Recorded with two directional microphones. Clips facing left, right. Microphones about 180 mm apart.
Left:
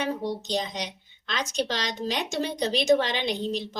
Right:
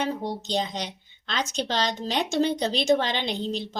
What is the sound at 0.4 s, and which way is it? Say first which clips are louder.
Speech: right 1 dB; 30° right (ahead or behind).